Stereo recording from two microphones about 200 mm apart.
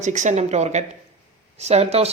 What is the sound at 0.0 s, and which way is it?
Speech, 35° right (ahead or behind).